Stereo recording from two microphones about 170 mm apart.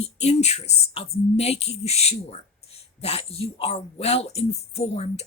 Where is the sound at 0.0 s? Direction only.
40° left (ahead or behind).